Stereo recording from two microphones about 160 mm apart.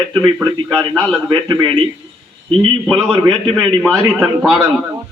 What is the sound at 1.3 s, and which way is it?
Speech, 25° right (ahead or behind).